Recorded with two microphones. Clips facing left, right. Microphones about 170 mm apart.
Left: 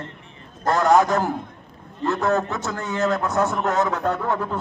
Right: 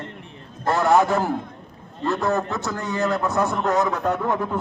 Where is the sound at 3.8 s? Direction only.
15° right (ahead or behind).